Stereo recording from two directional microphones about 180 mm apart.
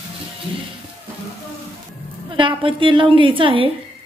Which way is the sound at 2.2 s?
30° right (ahead or behind).